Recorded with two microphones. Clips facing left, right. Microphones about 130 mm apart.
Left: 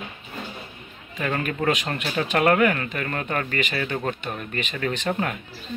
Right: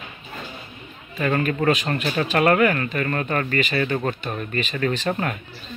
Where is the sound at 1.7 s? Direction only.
15° left (ahead or behind).